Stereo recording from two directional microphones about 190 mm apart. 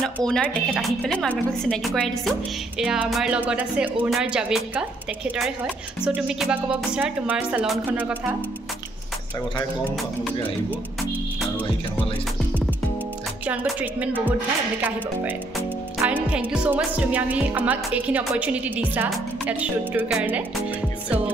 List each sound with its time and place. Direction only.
0.0 s a woman's voice: 5° left (ahead or behind)
5.9 s speech: 5° right (ahead or behind)
10.2 s a woman's voice: 5° left (ahead or behind)
13.5 s speech: 5° right (ahead or behind)